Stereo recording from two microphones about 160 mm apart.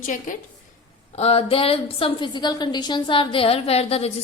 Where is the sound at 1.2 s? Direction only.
40° left (ahead or behind).